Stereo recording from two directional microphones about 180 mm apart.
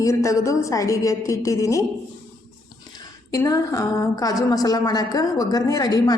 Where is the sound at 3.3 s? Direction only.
20° left (ahead or behind).